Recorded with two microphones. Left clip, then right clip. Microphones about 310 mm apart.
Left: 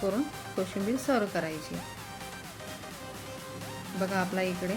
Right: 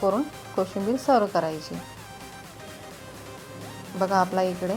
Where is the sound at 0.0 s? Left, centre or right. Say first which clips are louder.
Right 6 dB; centre.